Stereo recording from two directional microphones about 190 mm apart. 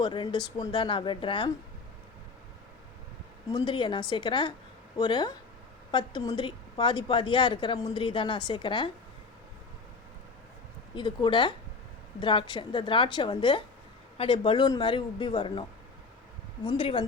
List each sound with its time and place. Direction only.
0.0 s a woman's voice: 25° left (ahead or behind)
3.5 s a woman's voice: 25° left (ahead or behind)
10.9 s a woman's voice: 25° left (ahead or behind)
16.6 s a woman's voice: 25° left (ahead or behind)